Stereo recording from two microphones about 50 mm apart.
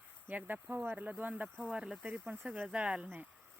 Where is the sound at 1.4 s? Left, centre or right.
Right.